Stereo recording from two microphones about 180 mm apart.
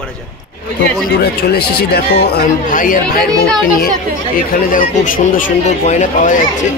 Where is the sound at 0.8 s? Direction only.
60° left (ahead or behind).